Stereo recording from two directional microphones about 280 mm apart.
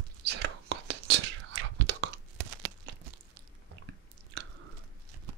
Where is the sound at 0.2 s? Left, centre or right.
Right.